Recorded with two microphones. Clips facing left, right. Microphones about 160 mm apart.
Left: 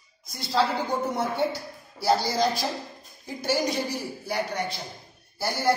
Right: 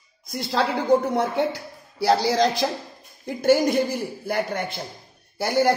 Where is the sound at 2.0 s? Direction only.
80° right.